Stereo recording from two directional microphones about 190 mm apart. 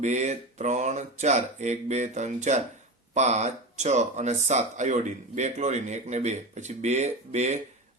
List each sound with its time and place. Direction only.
0.0 s speech: 40° right (ahead or behind)